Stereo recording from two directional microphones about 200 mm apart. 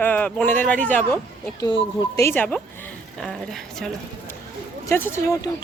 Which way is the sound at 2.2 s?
10° left (ahead or behind).